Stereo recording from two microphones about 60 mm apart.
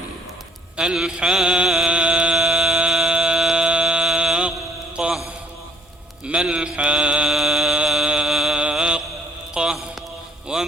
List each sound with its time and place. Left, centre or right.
0.8 s mantra: centre
1.9 s music: centre
2.3 s a sound: centre
5.0 s mantra: centre
6.2 s mantra: centre
7.3 s music: centre
7.9 s mantra: centre
8.7 s mantra: centre
9.6 s music: centre